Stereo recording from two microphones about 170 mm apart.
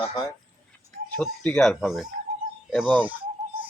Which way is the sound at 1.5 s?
5° left (ahead or behind).